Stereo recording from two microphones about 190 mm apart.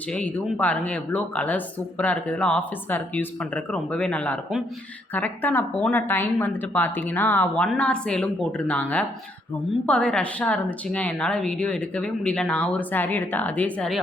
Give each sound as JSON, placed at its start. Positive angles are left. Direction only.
{"t": 0.1, "sound": "speech", "side_deg": 5}